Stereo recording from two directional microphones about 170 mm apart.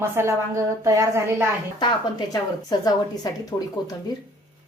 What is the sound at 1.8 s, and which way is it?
A woman's voice, 25° left (ahead or behind).